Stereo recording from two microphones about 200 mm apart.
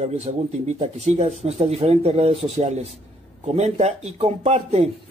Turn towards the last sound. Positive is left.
turn(degrees=-35)  # may be behind; listen again after turning